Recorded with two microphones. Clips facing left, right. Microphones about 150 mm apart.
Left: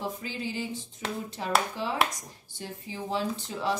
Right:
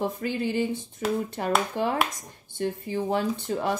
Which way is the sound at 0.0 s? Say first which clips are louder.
Right 7 dB; 55° right (ahead or behind).